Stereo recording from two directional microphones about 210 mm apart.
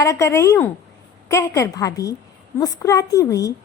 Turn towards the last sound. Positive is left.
turn(degrees=15)  # may be behind; listen again after turning